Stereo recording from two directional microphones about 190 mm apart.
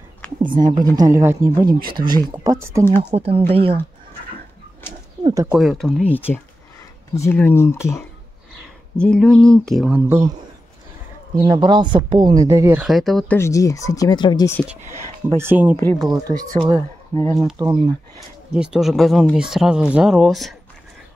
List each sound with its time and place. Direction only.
0.4 s speech: 25° right (ahead or behind)
3.1 s speech: 40° right (ahead or behind)
5.2 s speech: 15° right (ahead or behind)
5.5 s speech: centre (ahead or behind)
8.9 s speech: 5° left (ahead or behind); by 10.3 s 15° right (ahead or behind)
11.3 s speech: 25° right (ahead or behind)
12.8 s speech: centre (ahead or behind)
13.4 s speech: 15° left (ahead or behind)
15.2 s speech: 10° right (ahead or behind)
17.1 s speech: 30° right (ahead or behind)
17.6 s speech: 20° right (ahead or behind)
18.5 s speech: centre (ahead or behind)